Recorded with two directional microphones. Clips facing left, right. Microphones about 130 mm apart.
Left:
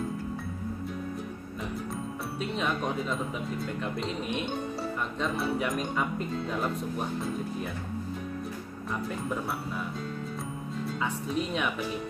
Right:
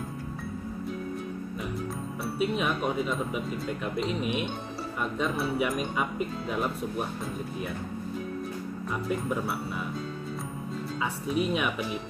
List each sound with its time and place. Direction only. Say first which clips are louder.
2.2 s speech: right 4 dB; 5° right (ahead or behind)
11.0 s speech: right 3 dB; 5° right (ahead or behind)